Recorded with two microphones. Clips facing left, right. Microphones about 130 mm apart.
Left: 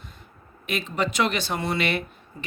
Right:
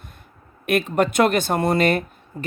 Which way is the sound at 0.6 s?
55° right (ahead or behind).